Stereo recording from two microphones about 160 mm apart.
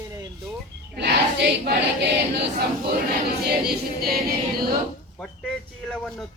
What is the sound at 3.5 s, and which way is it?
Choir, 75° right (ahead or behind).